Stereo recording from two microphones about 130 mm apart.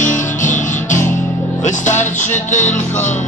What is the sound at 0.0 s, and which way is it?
Music, 75° left (ahead or behind).